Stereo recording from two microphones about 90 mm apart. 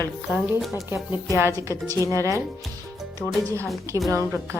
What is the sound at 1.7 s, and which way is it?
Speech, 35° left (ahead or behind).